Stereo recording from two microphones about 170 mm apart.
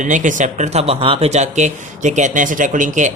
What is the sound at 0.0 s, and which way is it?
Speech, 50° right (ahead or behind).